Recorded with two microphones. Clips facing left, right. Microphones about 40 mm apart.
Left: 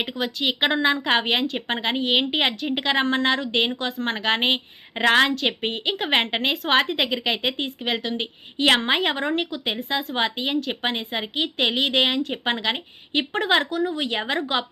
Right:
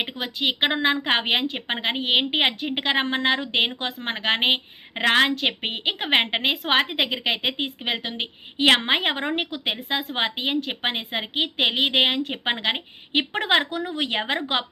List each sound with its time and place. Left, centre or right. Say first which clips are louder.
0.0 s a woman's voice: left 1 dB; centre
13.7 s speech: left 2 dB; right